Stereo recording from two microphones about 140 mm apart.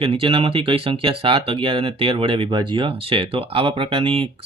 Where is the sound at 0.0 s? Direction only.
40° right (ahead or behind).